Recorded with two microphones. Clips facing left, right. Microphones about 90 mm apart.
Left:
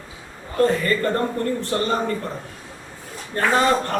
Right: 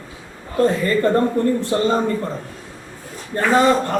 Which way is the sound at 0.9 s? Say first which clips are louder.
Right 4 dB; 20° right (ahead or behind).